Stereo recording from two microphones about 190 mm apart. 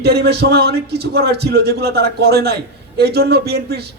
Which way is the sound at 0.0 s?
55° right (ahead or behind).